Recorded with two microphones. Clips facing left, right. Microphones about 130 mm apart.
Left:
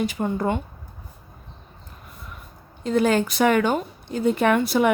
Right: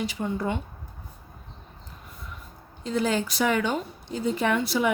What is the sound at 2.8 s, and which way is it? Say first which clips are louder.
Speech: left 6 dB; 60° left (ahead or behind).